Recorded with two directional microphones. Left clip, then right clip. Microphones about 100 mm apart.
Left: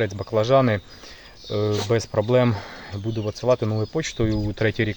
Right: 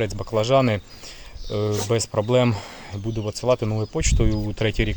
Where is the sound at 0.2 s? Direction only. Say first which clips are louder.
Left 1 dB; 5° right (ahead or behind).